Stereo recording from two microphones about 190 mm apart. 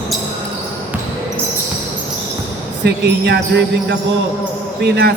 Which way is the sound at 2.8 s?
60° right (ahead or behind).